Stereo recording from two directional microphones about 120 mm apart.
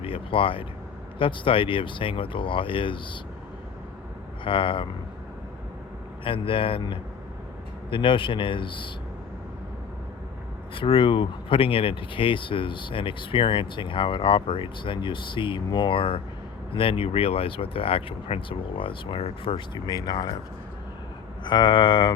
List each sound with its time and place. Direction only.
0.0 s speech: 50° left (ahead or behind)
4.4 s speech: 45° left (ahead or behind)
6.2 s speech: 45° left (ahead or behind)
10.8 s speech: 45° left (ahead or behind)
21.4 s speech: 40° left (ahead or behind)